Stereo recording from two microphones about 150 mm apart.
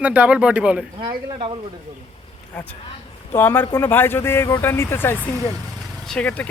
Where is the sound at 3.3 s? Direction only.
15° left (ahead or behind).